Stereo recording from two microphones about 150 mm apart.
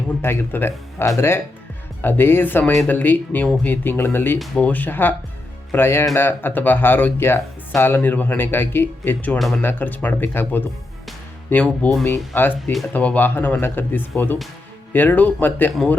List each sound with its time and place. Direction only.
0.2 s speech: 15° left (ahead or behind)